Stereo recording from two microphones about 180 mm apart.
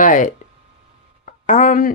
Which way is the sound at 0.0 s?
45° left (ahead or behind).